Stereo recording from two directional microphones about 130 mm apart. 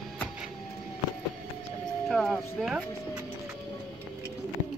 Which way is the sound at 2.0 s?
5° left (ahead or behind).